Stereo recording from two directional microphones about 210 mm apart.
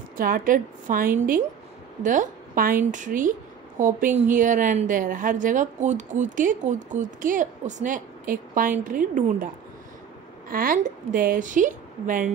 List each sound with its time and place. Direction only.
0.2 s a woman's voice: 40° right (ahead or behind)
10.5 s a woman's voice: 40° right (ahead or behind)